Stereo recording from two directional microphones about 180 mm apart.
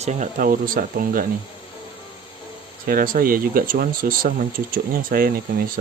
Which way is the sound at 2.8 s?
50° right (ahead or behind).